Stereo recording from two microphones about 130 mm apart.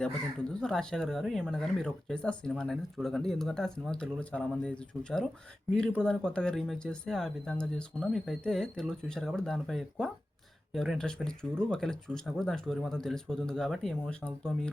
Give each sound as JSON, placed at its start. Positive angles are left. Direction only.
{"t": 0.0, "sound": "speech", "side_deg": 5}